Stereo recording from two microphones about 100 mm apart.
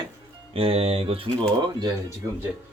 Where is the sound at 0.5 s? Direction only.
75° right (ahead or behind); by 1.9 s 50° right (ahead or behind).